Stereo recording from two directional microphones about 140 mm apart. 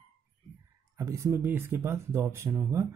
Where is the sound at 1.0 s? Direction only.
20° right (ahead or behind).